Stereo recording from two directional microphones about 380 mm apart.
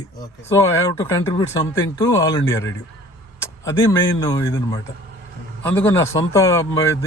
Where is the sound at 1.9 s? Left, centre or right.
Centre.